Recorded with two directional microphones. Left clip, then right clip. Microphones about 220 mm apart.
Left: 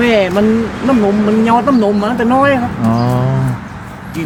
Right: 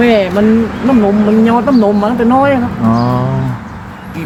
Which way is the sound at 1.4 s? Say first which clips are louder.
Even; 30° left (ahead or behind).